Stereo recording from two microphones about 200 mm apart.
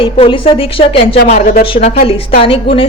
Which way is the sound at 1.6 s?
25° left (ahead or behind).